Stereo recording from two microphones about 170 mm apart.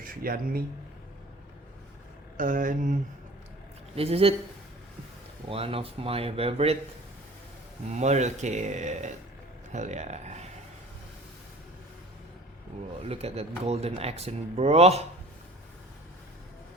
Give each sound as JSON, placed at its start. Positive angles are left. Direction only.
{"t": 0.0, "sound": "speech", "side_deg": -55}
{"t": 2.4, "sound": "speech", "side_deg": -50}
{"t": 3.9, "sound": "speech", "side_deg": -35}
{"t": 5.5, "sound": "speech", "side_deg": -35}
{"t": 7.9, "sound": "speech", "side_deg": -45}
{"t": 13.1, "sound": "speech", "side_deg": -35}